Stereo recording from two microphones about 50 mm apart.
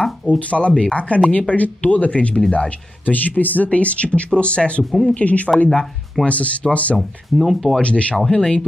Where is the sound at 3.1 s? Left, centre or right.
Left.